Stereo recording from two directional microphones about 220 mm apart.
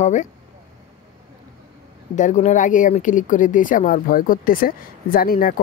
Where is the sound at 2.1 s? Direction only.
35° left (ahead or behind).